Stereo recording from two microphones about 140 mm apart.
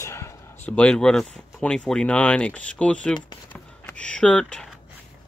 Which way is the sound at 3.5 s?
10° left (ahead or behind).